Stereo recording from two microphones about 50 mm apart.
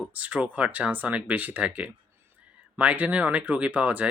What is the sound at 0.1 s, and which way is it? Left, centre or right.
Speech, right.